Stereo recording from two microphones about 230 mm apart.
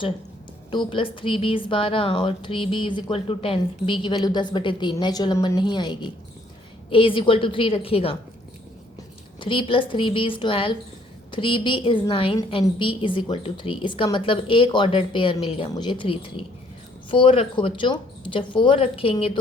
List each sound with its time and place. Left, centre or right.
0.7 s a woman's voice: left
9.4 s a woman's voice: left